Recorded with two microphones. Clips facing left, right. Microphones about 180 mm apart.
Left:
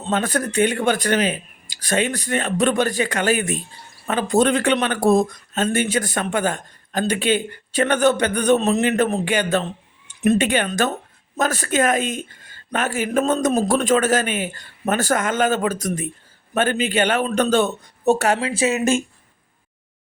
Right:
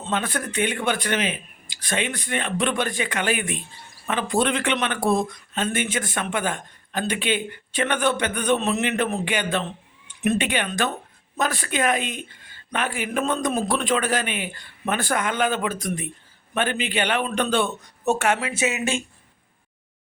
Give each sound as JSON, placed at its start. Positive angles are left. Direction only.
{"t": 0.0, "sound": "a woman's voice", "side_deg": 40}